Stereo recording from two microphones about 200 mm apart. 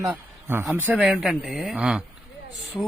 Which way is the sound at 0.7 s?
10° right (ahead or behind).